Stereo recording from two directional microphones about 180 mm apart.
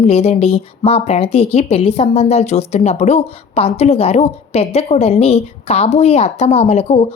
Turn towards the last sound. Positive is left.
turn(degrees=35)  # may be behind; listen again after turning